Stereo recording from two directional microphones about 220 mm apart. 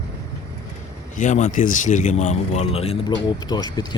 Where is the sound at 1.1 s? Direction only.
35° left (ahead or behind); by 3.8 s 20° left (ahead or behind).